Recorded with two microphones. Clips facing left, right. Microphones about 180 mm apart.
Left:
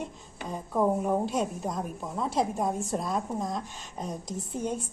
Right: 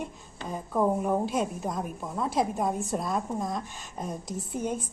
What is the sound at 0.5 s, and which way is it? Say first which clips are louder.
A woman's voice: even; centre (ahead or behind).